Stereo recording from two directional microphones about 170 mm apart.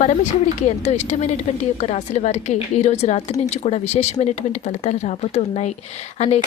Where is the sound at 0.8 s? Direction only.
40° left (ahead or behind).